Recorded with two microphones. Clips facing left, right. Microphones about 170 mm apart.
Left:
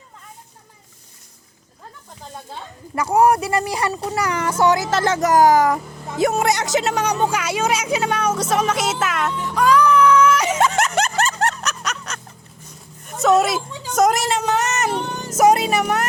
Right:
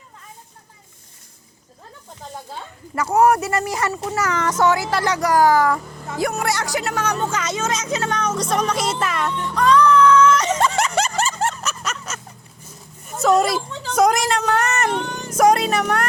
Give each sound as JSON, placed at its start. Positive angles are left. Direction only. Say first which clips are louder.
{"t": 2.9, "sound": "speech", "louder": "even", "side_deg": 15}
{"t": 4.8, "sound": "speech", "louder": "left 2 dB", "side_deg": 20}
{"t": 15.0, "sound": "music", "louder": "left 1 dB", "side_deg": 35}
{"t": 15.4, "sound": "speech", "louder": "left 1 dB", "side_deg": 5}